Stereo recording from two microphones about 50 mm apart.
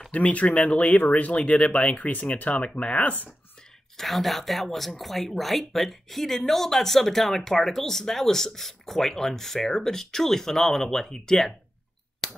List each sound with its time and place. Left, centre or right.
0.1 s speech: left
3.0 s speech: left
3.9 s speech: centre
12.2 s a sound: centre